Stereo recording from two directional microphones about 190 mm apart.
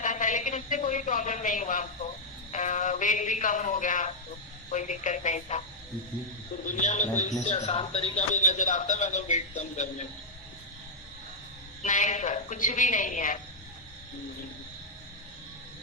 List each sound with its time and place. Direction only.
0.0 s a sound: 40° left (ahead or behind)
2.5 s a man's voice: 40° left (ahead or behind)
6.7 s a man's voice: 40° left (ahead or behind)
11.8 s a man's voice: 40° left (ahead or behind)